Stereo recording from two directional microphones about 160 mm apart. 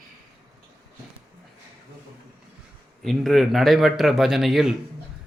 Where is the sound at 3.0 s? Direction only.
Centre (ahead or behind).